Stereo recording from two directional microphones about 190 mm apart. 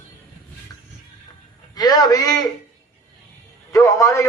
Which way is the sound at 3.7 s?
20° left (ahead or behind).